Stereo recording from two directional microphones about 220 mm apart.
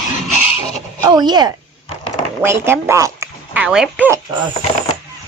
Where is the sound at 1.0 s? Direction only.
20° right (ahead or behind).